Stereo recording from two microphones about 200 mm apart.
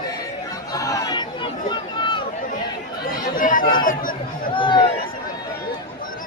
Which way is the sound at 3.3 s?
40° left (ahead or behind).